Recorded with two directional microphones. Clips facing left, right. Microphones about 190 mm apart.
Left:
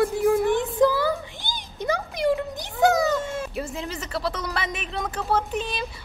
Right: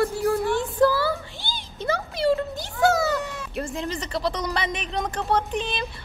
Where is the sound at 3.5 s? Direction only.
Centre (ahead or behind).